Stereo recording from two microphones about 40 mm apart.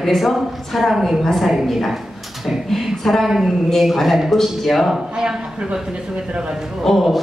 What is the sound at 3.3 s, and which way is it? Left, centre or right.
A man's voice, centre.